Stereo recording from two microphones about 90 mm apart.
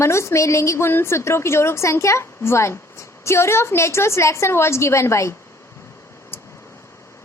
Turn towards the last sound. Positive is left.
turn(degrees=25)  # may be behind; listen again after turning